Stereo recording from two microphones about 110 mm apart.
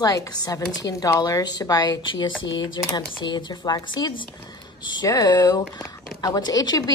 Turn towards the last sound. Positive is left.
turn(degrees=35)  # may be behind; listen again after turning